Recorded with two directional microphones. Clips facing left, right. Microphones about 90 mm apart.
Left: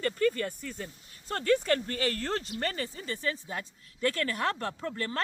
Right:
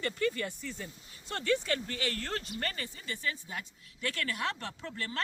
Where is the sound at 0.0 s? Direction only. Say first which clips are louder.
Left 4 dB; 40° left (ahead or behind).